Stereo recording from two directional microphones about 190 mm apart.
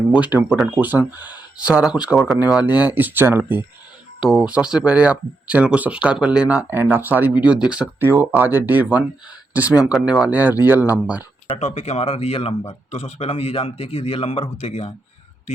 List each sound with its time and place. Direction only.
0.1 s speech: 10° right (ahead or behind)
11.5 s speech: 35° left (ahead or behind)